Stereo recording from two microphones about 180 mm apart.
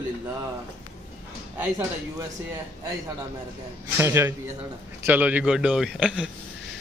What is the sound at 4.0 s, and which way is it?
A man's voice, 15° right (ahead or behind).